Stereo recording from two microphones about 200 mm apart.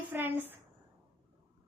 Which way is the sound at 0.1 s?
10° right (ahead or behind).